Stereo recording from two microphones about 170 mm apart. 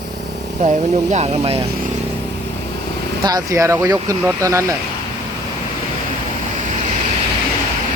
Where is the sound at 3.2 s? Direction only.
20° right (ahead or behind).